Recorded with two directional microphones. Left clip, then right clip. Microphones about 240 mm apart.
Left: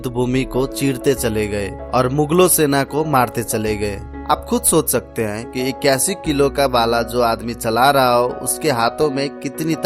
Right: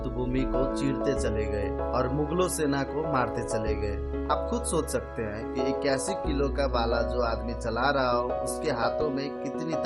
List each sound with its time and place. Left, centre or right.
0.0 s speech: left